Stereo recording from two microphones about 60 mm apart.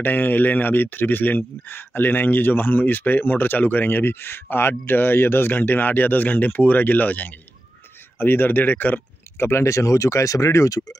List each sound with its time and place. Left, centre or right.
0.0 s speech: left
9.4 s speech: left